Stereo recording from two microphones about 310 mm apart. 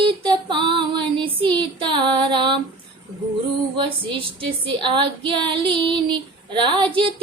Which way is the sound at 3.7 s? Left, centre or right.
Centre.